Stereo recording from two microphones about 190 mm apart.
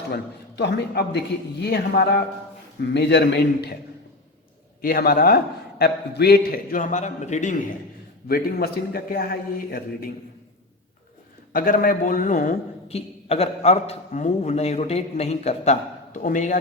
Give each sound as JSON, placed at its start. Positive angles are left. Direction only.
{"t": 0.1, "sound": "a man's voice", "side_deg": 65}
{"t": 4.8, "sound": "a man's voice", "side_deg": 50}
{"t": 8.3, "sound": "a man's voice", "side_deg": 55}
{"t": 11.5, "sound": "a man's voice", "side_deg": 45}